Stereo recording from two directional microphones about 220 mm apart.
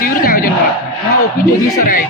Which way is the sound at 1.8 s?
40° left (ahead or behind).